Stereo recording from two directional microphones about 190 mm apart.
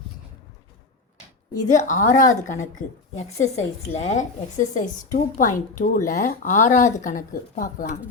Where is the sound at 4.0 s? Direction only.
40° left (ahead or behind).